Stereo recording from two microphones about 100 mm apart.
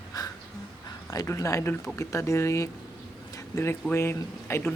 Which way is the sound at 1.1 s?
30° left (ahead or behind).